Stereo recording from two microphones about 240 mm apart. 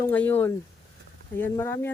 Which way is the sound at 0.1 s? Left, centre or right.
Centre.